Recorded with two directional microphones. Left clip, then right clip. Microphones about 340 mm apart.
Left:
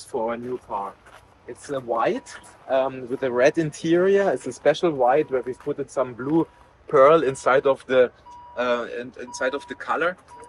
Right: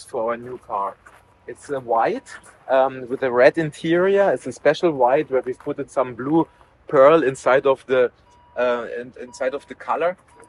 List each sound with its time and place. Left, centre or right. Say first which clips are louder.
0.1 s speech: right 3 dB; centre
1.6 s speech: right 3 dB; centre